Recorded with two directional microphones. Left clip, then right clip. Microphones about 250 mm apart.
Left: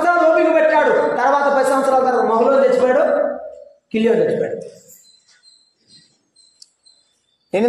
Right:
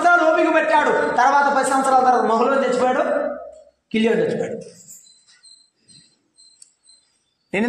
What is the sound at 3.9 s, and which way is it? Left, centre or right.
Speech, centre.